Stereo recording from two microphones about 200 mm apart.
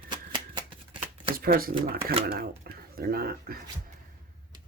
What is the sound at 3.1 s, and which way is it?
Speech, 50° right (ahead or behind).